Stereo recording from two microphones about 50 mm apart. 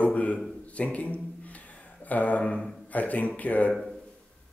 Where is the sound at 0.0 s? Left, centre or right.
Left.